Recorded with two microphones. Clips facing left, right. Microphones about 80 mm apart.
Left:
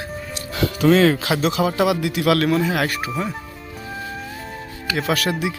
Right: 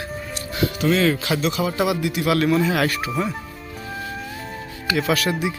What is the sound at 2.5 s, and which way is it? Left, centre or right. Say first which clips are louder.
Speech: even; left.